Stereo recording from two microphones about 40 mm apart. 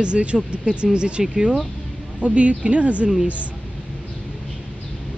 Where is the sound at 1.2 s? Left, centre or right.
Centre.